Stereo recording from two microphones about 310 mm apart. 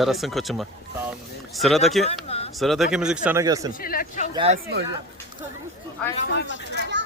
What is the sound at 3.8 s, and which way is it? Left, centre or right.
Speech, left.